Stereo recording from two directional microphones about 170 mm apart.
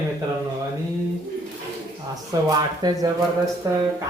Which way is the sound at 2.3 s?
20° right (ahead or behind).